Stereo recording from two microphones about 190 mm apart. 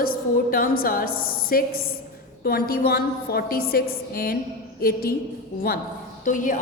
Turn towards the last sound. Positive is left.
turn(degrees=45)  # may be behind; listen again after turning